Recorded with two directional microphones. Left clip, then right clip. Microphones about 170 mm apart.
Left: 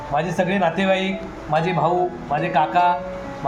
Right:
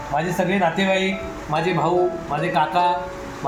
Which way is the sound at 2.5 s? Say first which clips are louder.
Left 2 dB; centre (ahead or behind).